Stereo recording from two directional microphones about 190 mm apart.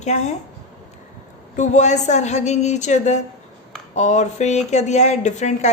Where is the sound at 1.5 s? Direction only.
40° left (ahead or behind).